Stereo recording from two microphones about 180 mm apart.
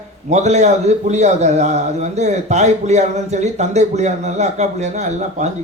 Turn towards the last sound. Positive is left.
turn(degrees=-40)  # may be behind; listen again after turning